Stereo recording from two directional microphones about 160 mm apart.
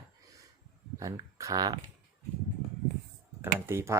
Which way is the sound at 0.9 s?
20° right (ahead or behind).